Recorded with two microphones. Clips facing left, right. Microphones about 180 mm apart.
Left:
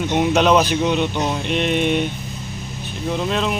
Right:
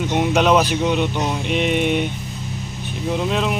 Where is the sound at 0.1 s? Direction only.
5° right (ahead or behind).